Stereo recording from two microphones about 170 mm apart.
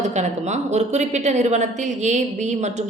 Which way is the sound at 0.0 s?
45° right (ahead or behind).